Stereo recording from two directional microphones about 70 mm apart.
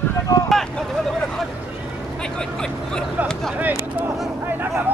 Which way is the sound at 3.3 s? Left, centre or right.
Centre.